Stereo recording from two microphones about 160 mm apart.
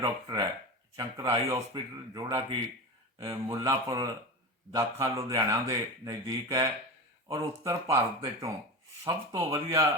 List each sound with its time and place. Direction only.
0.0 s speech: 25° right (ahead or behind)